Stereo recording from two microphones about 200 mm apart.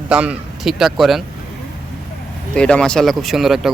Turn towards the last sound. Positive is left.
turn(degrees=0)  # may be behind; listen again after turning